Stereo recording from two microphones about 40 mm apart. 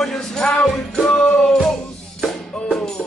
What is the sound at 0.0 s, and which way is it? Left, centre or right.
Music, centre.